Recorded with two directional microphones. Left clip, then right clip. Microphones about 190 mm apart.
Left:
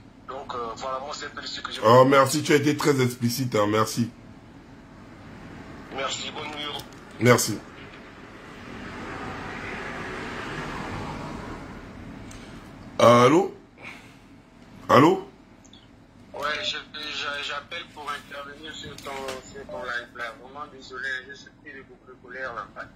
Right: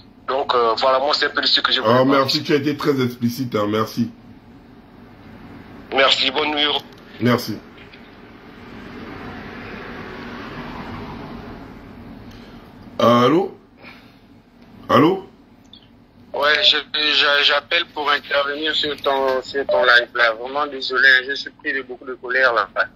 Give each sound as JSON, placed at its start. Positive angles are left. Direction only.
{"t": 0.3, "sound": "a man's voice", "side_deg": -40}
{"t": 1.9, "sound": "speech", "side_deg": 20}
{"t": 5.9, "sound": "a man's voice", "side_deg": -40}
{"t": 12.9, "sound": "a sound", "side_deg": 5}
{"t": 14.9, "sound": "speech", "side_deg": 10}
{"t": 16.3, "sound": "a man's voice", "side_deg": -40}